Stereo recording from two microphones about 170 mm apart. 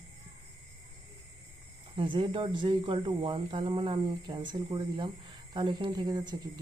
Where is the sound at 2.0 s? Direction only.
30° right (ahead or behind).